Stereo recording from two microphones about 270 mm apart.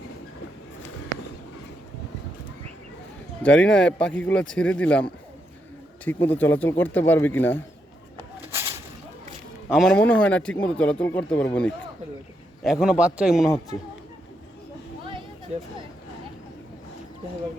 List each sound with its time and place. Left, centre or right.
3.4 s speech: centre
6.1 s speech: centre
9.6 s speech: centre
15.5 s speech: right